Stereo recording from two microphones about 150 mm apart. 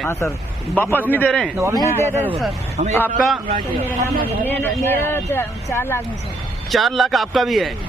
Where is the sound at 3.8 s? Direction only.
15° right (ahead or behind).